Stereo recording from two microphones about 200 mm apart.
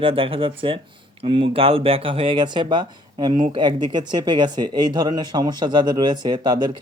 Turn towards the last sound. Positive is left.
turn(degrees=-20)  # may be behind; listen again after turning